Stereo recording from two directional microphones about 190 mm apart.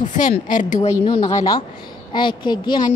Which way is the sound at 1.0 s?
25° left (ahead or behind).